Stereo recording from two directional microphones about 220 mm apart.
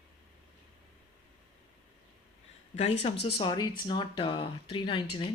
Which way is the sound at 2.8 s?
25° left (ahead or behind).